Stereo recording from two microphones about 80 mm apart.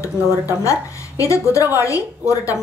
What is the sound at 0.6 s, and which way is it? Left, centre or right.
A woman's voice, left.